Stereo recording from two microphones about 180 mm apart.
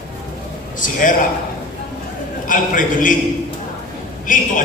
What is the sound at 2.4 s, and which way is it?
Speech, 50° left (ahead or behind).